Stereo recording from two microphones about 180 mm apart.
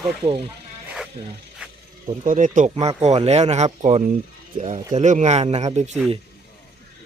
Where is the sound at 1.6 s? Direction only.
5° right (ahead or behind).